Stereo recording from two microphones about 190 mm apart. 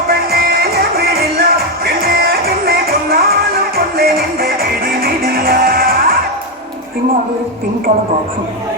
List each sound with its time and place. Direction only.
0.1 s music: 55° right (ahead or behind)